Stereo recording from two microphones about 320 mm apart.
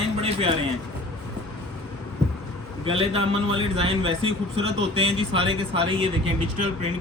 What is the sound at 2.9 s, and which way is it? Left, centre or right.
Speech, centre.